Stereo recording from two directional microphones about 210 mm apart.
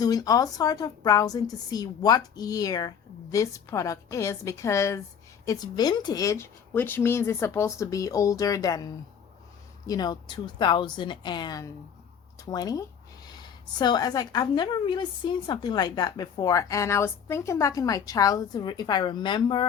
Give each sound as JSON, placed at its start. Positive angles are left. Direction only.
{"t": 0.0, "sound": "a woman's voice", "side_deg": 15}